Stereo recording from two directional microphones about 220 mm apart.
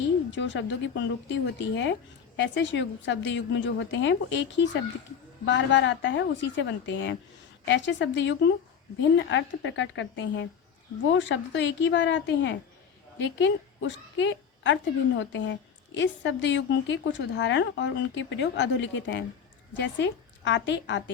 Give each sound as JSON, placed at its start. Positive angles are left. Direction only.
{"t": 0.3, "sound": "a woman's voice", "side_deg": 55}